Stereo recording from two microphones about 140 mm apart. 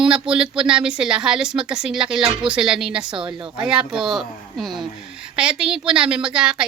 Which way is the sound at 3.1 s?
35° right (ahead or behind).